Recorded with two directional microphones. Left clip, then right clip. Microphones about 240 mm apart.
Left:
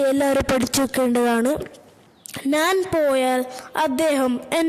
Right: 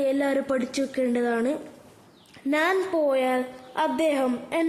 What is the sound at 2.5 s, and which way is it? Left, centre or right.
A woman's voice, left.